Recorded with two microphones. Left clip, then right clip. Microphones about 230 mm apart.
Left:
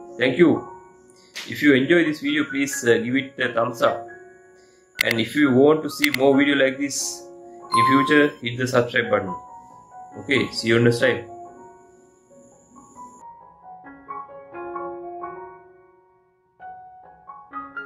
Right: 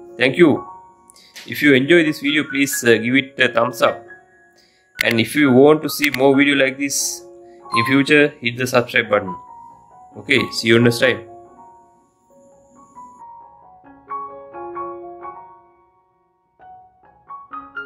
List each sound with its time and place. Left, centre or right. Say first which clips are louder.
0.1 s speech: right 4 dB; right
5.2 s speech: right 5 dB; right
5.9 s speech: right 3 dB; centre
6.2 s speech: right 4 dB; right
10.2 s speech: right 5 dB; right
14.5 s music: even; centre